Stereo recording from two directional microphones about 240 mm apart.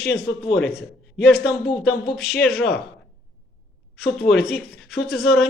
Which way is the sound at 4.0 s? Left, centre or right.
Left.